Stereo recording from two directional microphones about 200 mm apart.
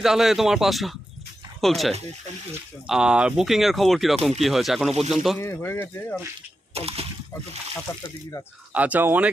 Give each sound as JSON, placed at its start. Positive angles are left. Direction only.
{"t": 0.0, "sound": "speech", "side_deg": 0}
{"t": 5.4, "sound": "speech", "side_deg": 10}
{"t": 6.7, "sound": "speech", "side_deg": -30}
{"t": 7.9, "sound": "speech", "side_deg": 15}
{"t": 8.7, "sound": "speech", "side_deg": -10}